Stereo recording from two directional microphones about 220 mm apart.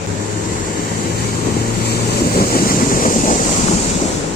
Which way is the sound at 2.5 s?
40° left (ahead or behind).